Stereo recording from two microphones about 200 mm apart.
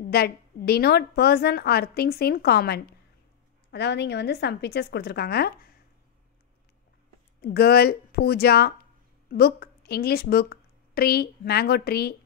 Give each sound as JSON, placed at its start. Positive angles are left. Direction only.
{"t": 0.0, "sound": "a woman's voice", "side_deg": 50}
{"t": 7.4, "sound": "a woman's voice", "side_deg": 50}